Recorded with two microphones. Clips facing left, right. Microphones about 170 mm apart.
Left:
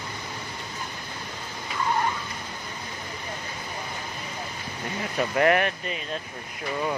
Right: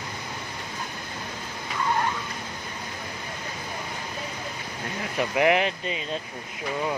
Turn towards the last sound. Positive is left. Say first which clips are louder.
# even
turn(degrees=-10)  # may be behind; listen again after turning